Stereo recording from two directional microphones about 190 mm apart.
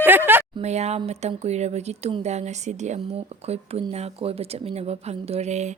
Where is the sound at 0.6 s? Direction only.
35° right (ahead or behind).